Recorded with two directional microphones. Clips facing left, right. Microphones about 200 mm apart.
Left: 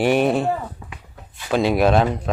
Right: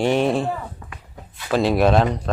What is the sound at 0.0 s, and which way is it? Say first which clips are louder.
Speech: left 1 dB; 5° left (ahead or behind).